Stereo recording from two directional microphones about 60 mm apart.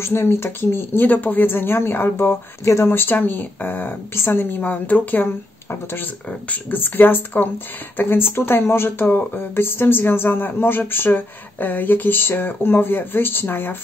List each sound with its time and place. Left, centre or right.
0.0 s speech: left
2.9 s speech: left